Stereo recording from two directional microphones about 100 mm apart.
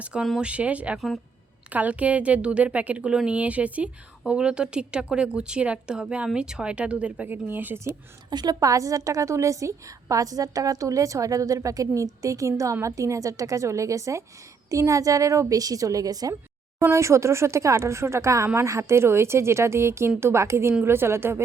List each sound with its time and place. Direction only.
0.0 s speech: 10° right (ahead or behind)
0.9 s speech: centre (ahead or behind)
1.7 s speech: 15° right (ahead or behind)
8.3 s a woman's voice: 45° right (ahead or behind); by 21.4 s 25° right (ahead or behind)